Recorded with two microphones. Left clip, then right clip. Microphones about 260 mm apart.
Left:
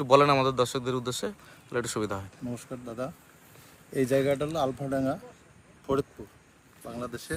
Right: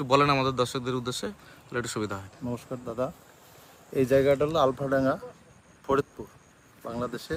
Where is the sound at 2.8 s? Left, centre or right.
Right.